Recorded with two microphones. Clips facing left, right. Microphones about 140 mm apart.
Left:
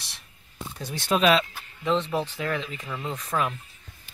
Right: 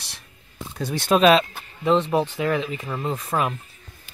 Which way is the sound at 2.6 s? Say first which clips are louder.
Right 6 dB; 45° right (ahead or behind).